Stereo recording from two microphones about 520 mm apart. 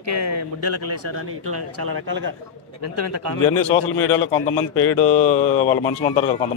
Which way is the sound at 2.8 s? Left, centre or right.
Right.